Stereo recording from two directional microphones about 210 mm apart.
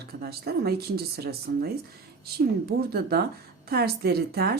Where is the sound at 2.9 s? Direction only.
45° right (ahead or behind).